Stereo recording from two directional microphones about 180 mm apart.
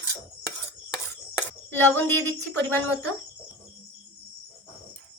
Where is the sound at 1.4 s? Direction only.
10° left (ahead or behind).